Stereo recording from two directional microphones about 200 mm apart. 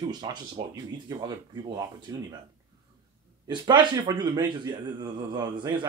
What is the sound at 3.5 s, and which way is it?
Speech, 20° right (ahead or behind).